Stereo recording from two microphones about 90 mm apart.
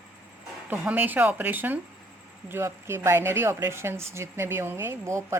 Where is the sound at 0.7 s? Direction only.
20° right (ahead or behind).